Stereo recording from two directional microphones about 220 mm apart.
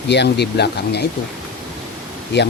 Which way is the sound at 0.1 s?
50° left (ahead or behind).